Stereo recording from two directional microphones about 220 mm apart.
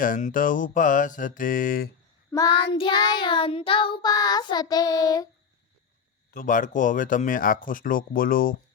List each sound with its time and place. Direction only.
0.0 s speech: 35° left (ahead or behind)
2.3 s child singing: 15° left (ahead or behind)
6.3 s speech: 35° left (ahead or behind)